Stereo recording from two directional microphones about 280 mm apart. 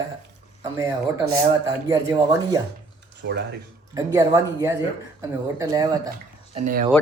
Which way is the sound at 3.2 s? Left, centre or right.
Right.